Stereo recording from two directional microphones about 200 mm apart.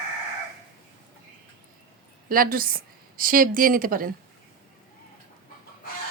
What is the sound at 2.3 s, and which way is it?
A woman's voice, 45° right (ahead or behind).